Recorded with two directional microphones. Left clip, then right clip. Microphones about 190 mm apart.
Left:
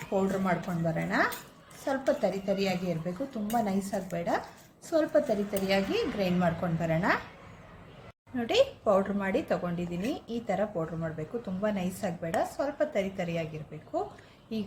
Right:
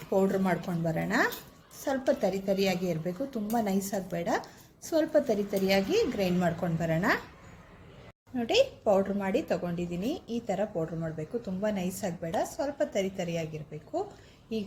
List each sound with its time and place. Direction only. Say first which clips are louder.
0.1 s a woman's voice: right 2 dB; 35° right (ahead or behind)
8.5 s a woman's voice: even; 15° right (ahead or behind)